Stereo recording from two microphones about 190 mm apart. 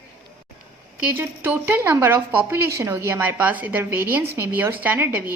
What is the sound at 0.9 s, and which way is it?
A woman's voice, 10° right (ahead or behind).